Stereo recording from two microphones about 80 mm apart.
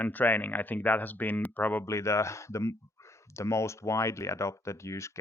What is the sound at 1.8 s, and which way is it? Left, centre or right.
Speech, left.